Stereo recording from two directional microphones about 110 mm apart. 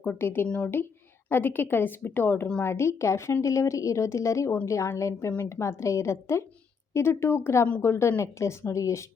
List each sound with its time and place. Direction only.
0.0 s a woman's voice: 20° left (ahead or behind)